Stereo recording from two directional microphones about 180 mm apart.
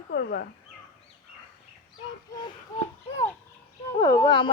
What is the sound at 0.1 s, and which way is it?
Speech, 65° left (ahead or behind).